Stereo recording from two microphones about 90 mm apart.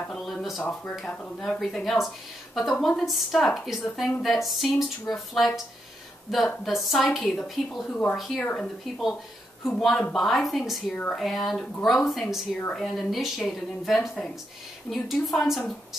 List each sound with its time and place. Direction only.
0.1 s a sound: centre (ahead or behind)
1.4 s a woman's voice: 5° left (ahead or behind)
8.4 s speech: 15° left (ahead or behind)
9.7 s a woman's voice: centre (ahead or behind)
12.5 s speech: 10° left (ahead or behind)
12.8 s a woman's voice: centre (ahead or behind)